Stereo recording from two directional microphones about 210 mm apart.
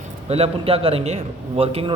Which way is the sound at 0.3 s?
30° right (ahead or behind).